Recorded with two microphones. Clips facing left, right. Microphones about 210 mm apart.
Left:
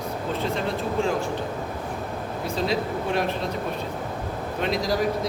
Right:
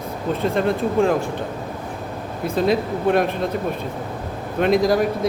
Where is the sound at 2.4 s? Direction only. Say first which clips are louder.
Right 7 dB; 55° right (ahead or behind).